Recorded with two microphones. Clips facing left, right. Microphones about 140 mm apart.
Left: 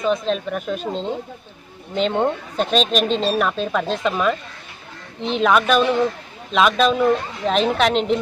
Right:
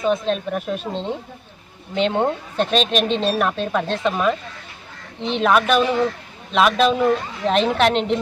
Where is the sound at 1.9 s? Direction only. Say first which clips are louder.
Even; centre (ahead or behind).